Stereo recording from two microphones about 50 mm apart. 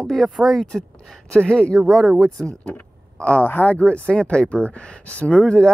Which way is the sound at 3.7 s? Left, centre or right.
Left.